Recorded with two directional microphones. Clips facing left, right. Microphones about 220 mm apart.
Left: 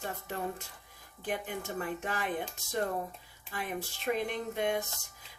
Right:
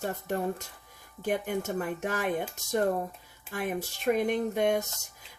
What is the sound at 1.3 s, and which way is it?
Speech, 50° right (ahead or behind).